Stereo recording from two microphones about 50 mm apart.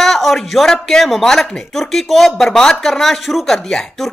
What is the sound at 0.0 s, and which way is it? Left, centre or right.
Speech, centre.